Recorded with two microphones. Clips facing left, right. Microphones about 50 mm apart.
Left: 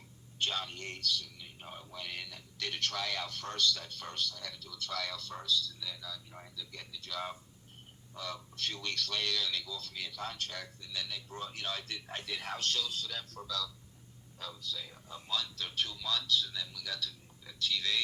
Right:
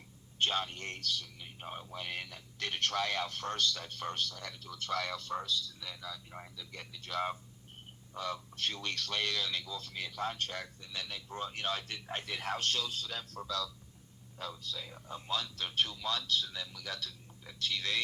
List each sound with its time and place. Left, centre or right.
0.3 s a man's voice: right
6.7 s a man's voice: right
14.6 s a man's voice: right